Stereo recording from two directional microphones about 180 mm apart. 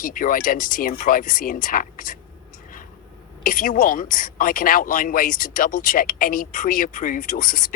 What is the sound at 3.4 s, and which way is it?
Speech, 50° left (ahead or behind).